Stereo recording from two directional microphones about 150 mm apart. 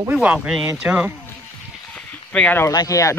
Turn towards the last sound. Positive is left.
turn(degrees=20)  # may be behind; listen again after turning